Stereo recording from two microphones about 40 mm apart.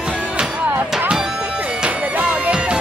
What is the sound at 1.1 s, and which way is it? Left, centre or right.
Music, right.